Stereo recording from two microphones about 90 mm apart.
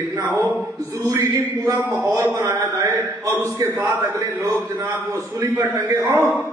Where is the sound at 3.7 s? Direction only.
20° right (ahead or behind).